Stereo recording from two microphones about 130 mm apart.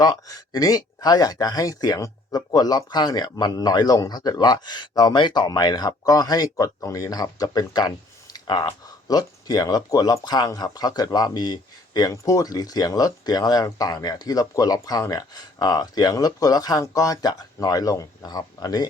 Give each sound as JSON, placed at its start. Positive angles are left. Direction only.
{"t": 0.0, "sound": "speech", "side_deg": 30}